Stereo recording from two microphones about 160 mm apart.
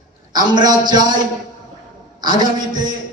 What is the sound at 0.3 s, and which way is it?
Speech, 25° right (ahead or behind).